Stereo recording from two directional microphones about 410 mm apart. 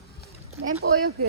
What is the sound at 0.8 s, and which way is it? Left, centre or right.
Speech, right.